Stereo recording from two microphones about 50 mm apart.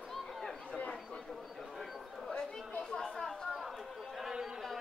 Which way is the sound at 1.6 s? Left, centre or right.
Centre.